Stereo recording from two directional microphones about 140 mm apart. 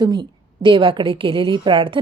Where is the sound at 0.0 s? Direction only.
35° right (ahead or behind).